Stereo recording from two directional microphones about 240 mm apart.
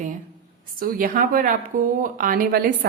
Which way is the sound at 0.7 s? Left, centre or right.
Right.